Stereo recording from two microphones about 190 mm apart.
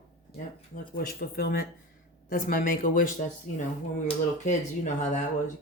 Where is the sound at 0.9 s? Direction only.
55° left (ahead or behind).